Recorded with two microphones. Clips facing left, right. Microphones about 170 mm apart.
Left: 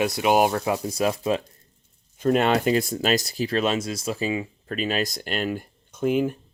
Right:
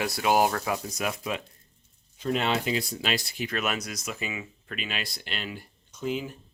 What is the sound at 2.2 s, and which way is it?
Speech, 50° left (ahead or behind).